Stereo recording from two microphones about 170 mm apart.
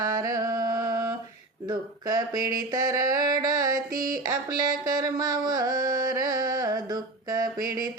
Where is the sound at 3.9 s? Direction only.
55° right (ahead or behind).